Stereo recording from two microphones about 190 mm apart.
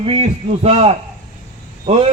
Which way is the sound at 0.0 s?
30° right (ahead or behind).